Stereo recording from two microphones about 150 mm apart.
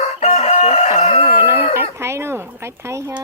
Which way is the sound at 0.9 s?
40° left (ahead or behind).